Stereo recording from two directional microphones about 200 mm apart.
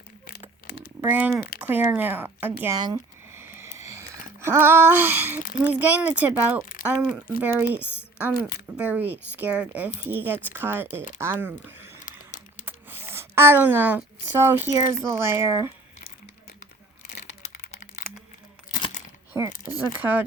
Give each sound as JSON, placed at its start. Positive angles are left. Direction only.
{"t": 1.0, "sound": "speech", "side_deg": -10}
{"t": 2.8, "sound": "a sound", "side_deg": -15}
{"t": 5.6, "sound": "speech", "side_deg": -5}
{"t": 8.4, "sound": "speech", "side_deg": 50}
{"t": 8.7, "sound": "speech", "side_deg": -10}
{"t": 12.6, "sound": "a sound", "side_deg": -10}
{"t": 15.0, "sound": "speech", "side_deg": -15}
{"t": 19.3, "sound": "mechanisms", "side_deg": -15}
{"t": 20.0, "sound": "speech", "side_deg": -10}